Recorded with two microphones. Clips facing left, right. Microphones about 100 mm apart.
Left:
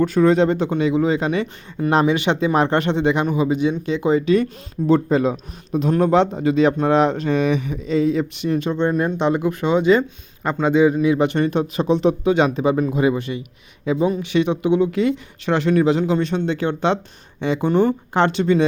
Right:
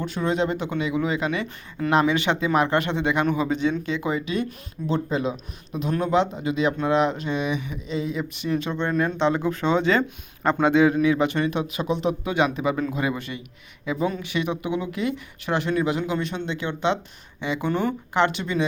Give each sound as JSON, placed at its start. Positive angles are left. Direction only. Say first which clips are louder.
{"t": 0.0, "sound": "speech", "louder": "left 9 dB", "side_deg": 45}
{"t": 4.9, "sound": "speech", "louder": "left 7 dB", "side_deg": 45}
{"t": 8.7, "sound": "speech", "louder": "left 5 dB", "side_deg": 15}
{"t": 11.3, "sound": "speech", "louder": "left 5 dB", "side_deg": 40}